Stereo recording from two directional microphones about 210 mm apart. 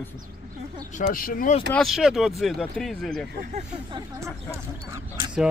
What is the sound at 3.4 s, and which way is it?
Speech, 30° right (ahead or behind).